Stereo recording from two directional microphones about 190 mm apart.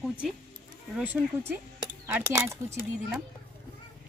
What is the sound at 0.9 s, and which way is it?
Speech, 10° right (ahead or behind).